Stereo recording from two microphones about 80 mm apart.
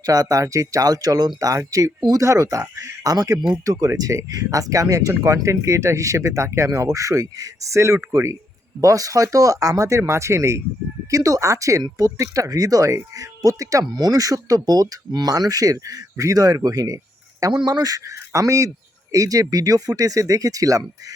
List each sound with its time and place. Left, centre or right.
0.0 s speech: right
3.1 s speech: right
8.8 s speech: right